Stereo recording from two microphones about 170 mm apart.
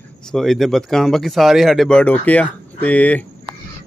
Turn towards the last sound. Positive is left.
turn(degrees=10)  # may be behind; listen again after turning